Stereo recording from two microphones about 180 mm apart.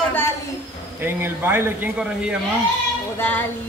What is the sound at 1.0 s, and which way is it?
A man's voice, 10° right (ahead or behind).